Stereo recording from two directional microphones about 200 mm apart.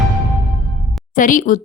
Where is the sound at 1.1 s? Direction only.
40° left (ahead or behind).